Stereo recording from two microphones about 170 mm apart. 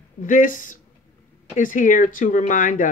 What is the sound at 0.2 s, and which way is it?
Speech, 50° left (ahead or behind).